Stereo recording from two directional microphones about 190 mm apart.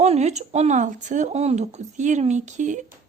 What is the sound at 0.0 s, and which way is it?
A woman's voice, 35° right (ahead or behind).